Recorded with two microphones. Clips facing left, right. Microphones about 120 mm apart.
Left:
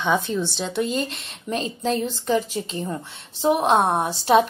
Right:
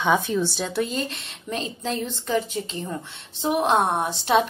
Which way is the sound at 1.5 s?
35° left (ahead or behind).